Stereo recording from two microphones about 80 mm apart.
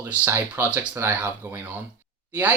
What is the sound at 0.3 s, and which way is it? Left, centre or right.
Speech, right.